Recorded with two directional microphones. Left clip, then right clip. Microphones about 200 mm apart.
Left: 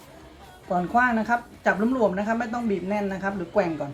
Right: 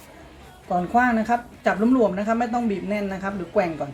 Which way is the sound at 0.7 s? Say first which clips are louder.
Right 2 dB; 25° left (ahead or behind).